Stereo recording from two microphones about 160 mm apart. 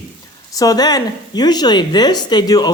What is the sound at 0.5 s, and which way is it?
Speech, 25° left (ahead or behind).